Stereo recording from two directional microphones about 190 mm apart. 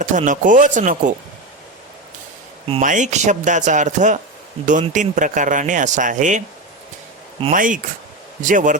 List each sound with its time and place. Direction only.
0.0 s speech: 40° right (ahead or behind)
2.8 s speech: 40° right (ahead or behind)
7.5 s speech: 45° right (ahead or behind)